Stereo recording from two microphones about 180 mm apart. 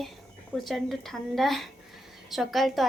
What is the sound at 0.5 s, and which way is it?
A woman's voice, centre (ahead or behind).